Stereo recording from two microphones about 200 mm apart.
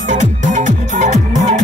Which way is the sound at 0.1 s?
40° right (ahead or behind).